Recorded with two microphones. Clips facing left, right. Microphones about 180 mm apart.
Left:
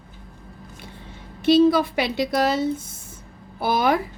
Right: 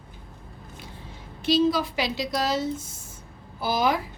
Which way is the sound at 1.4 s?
55° left (ahead or behind).